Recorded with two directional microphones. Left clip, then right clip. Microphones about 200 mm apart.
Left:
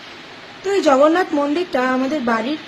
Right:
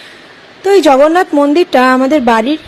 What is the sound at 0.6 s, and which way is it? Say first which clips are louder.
A woman's voice: right 7 dB; 45° right (ahead or behind).